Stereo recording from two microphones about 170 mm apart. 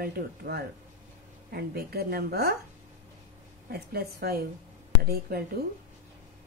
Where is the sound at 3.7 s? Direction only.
65° right (ahead or behind).